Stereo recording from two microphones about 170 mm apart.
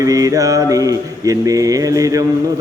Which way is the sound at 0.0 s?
20° right (ahead or behind).